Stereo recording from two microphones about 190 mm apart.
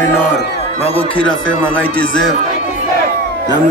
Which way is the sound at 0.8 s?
30° left (ahead or behind).